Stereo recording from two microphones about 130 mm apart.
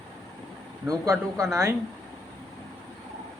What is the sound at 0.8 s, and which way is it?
Speech, 25° right (ahead or behind).